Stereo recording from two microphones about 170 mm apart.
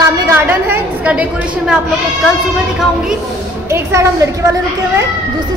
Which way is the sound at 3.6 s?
15° right (ahead or behind).